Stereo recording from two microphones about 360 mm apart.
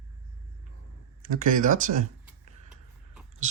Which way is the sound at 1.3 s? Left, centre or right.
Right.